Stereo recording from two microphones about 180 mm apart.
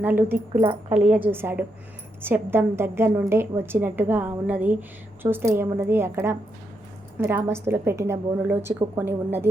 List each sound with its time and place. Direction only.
0.0 s a woman's voice: 10° right (ahead or behind)
0.6 s a woman's voice: 30° right (ahead or behind)
1.0 s a woman's voice: 10° right (ahead or behind)